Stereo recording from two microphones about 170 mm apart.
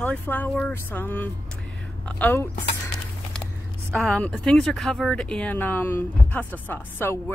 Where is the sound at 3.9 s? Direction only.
Centre (ahead or behind).